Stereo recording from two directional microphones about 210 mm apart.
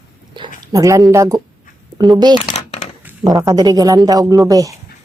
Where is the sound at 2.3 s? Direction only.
25° left (ahead or behind).